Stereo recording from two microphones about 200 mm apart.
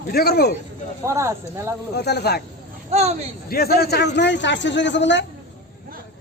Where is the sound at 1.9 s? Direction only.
55° left (ahead or behind).